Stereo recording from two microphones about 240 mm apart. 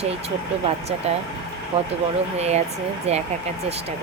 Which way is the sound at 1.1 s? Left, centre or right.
Right.